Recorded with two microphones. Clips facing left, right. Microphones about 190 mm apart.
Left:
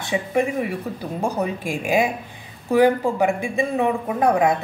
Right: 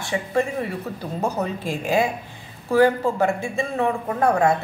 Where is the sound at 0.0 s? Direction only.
15° left (ahead or behind).